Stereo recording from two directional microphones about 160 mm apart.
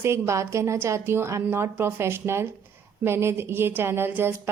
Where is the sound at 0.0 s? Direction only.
15° right (ahead or behind).